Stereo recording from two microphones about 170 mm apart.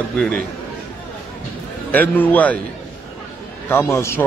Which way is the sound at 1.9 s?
10° left (ahead or behind).